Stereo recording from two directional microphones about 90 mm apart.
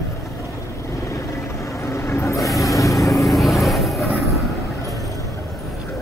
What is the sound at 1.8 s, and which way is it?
Vehicle, 30° left (ahead or behind).